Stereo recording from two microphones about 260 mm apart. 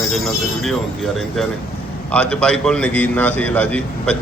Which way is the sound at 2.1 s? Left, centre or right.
Centre.